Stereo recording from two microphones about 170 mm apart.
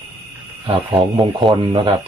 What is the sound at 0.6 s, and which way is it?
Speech, 25° right (ahead or behind).